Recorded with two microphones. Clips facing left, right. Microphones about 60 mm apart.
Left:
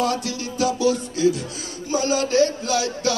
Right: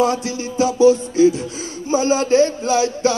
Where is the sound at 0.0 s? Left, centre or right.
Right.